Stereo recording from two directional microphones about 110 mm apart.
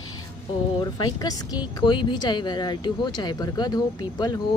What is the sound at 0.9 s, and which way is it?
Speech, 40° left (ahead or behind).